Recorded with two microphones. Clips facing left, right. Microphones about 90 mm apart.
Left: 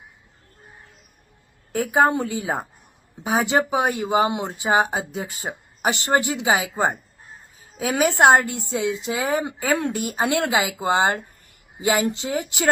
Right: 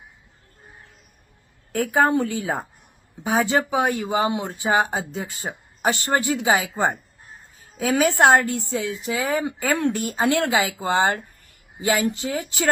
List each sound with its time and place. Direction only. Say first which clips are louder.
1.7 s a woman's voice: even; 15° left (ahead or behind)